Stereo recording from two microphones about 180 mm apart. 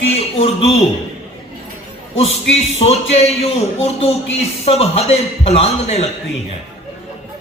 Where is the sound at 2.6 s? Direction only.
35° left (ahead or behind).